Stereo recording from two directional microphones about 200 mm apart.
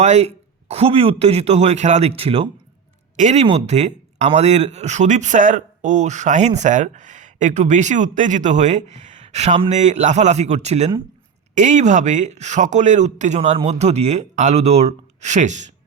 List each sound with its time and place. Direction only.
0.0 s speech: 35° right (ahead or behind)